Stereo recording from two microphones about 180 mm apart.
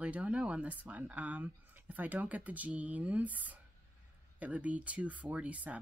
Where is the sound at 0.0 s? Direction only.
5° right (ahead or behind).